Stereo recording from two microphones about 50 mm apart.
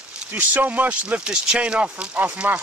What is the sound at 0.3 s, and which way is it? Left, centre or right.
Speech, right.